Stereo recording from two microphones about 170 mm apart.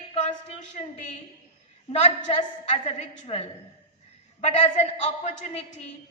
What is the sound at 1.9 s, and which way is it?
A woman's voice, 40° left (ahead or behind).